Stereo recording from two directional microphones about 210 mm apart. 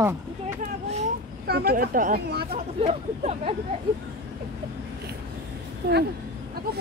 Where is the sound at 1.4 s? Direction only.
45° right (ahead or behind).